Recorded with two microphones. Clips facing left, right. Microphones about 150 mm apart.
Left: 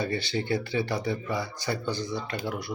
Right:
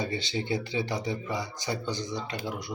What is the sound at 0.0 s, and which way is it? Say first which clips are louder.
A man's voice: left 2 dB; 20° right (ahead or behind).